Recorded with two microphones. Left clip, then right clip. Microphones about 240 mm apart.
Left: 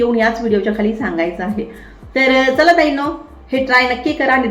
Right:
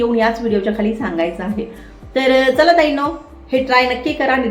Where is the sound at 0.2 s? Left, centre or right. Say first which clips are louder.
Left 1 dB; centre.